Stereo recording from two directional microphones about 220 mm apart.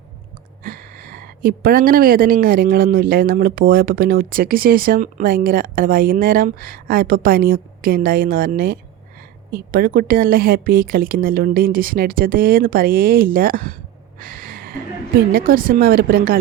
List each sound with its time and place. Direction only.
0.6 s speech: 40° right (ahead or behind)
14.2 s a sound: 40° right (ahead or behind)
15.3 s speech: 40° right (ahead or behind)